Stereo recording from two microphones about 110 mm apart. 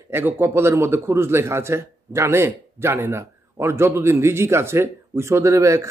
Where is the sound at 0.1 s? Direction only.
20° right (ahead or behind).